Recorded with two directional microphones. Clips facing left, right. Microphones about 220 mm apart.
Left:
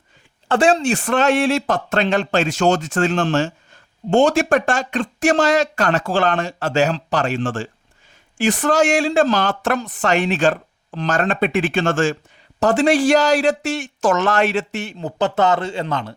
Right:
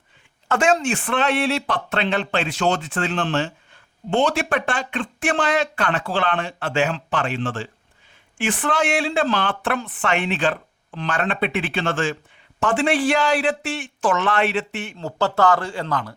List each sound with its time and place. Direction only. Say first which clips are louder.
0.4 s speech: left 3 dB; 30° left (ahead or behind)
14.9 s speech: left 2 dB; 20° left (ahead or behind)